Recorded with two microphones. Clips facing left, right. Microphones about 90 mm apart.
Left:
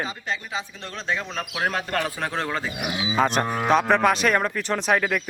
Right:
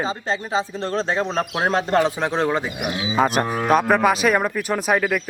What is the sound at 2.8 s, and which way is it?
Speech, 15° left (ahead or behind).